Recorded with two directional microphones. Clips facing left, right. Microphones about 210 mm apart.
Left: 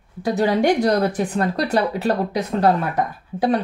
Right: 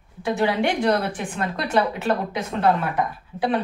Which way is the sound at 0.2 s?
40° left (ahead or behind).